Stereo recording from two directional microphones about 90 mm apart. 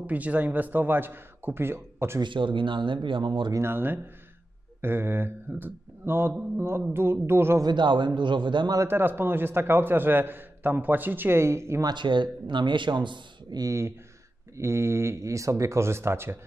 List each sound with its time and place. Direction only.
0.0 s a man's voice: 15° right (ahead or behind)
2.2 s a man's voice: 65° right (ahead or behind)
3.5 s a man's voice: 25° right (ahead or behind)
7.6 s a man's voice: 60° right (ahead or behind)
8.7 s a man's voice: 25° right (ahead or behind)
11.8 s a man's voice: 60° right (ahead or behind)
13.6 s speech: 35° right (ahead or behind)